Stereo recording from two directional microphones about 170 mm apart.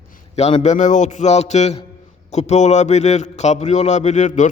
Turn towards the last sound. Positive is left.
turn(degrees=45)  # may be behind; listen again after turning